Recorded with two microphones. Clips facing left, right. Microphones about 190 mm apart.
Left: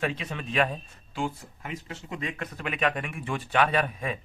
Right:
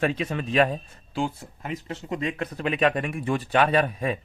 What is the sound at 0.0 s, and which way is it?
Speech, 45° right (ahead or behind).